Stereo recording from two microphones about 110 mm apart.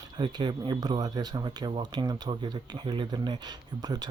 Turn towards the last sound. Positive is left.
turn(degrees=-40)  # may be behind; listen again after turning